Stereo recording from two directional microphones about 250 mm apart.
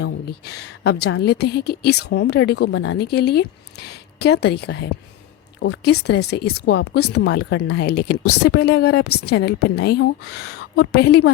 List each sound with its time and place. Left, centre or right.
0.0 s speech: left